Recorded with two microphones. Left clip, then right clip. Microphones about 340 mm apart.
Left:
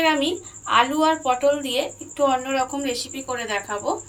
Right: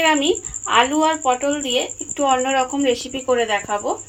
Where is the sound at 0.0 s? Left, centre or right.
Centre.